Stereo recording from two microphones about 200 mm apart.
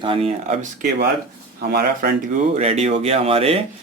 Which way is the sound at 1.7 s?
50° right (ahead or behind).